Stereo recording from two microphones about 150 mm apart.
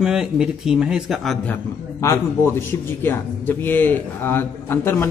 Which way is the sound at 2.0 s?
15° left (ahead or behind).